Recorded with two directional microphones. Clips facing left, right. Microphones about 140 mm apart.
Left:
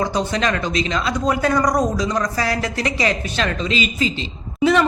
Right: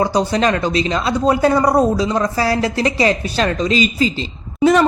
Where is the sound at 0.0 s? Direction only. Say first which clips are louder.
Right 5 dB; 35° right (ahead or behind).